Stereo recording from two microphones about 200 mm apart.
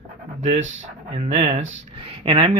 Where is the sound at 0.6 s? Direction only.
70° right (ahead or behind).